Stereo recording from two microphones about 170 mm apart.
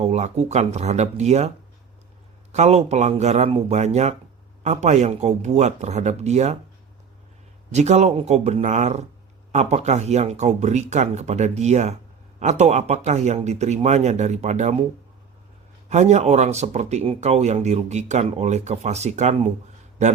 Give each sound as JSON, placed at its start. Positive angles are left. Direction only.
{"t": 0.0, "sound": "speech", "side_deg": -40}
{"t": 7.7, "sound": "speech", "side_deg": -40}
{"t": 15.9, "sound": "speech", "side_deg": -40}